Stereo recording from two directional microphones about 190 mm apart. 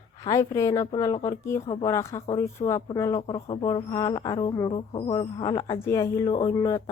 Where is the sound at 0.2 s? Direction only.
15° left (ahead or behind).